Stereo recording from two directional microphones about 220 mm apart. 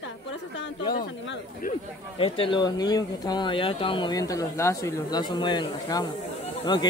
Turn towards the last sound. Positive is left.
turn(degrees=20)  # may be behind; listen again after turning